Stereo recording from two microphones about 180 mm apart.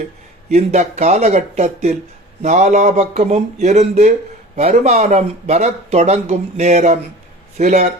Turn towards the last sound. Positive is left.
turn(degrees=-40)  # may be behind; listen again after turning